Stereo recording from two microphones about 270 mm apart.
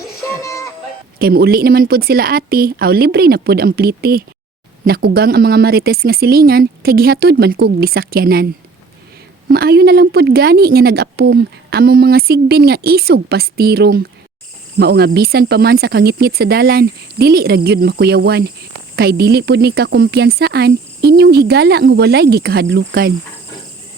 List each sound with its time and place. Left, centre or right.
0.4 s music: centre
1.2 s speech: right
9.5 s speech: right